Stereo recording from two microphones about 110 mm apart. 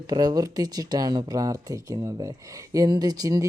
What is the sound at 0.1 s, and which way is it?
Speech, 35° right (ahead or behind).